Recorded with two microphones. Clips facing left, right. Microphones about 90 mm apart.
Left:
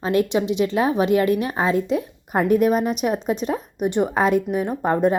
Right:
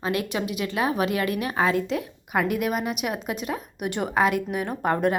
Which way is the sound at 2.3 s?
40° left (ahead or behind).